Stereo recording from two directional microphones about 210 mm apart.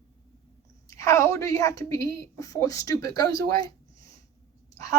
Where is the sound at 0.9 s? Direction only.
15° left (ahead or behind).